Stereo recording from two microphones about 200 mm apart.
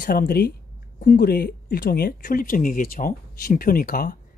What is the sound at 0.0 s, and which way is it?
Speech, 45° left (ahead or behind).